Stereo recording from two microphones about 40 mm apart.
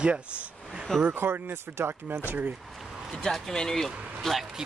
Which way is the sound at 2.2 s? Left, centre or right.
Right.